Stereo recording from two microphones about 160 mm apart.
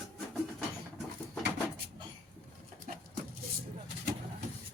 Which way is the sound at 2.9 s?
55° right (ahead or behind).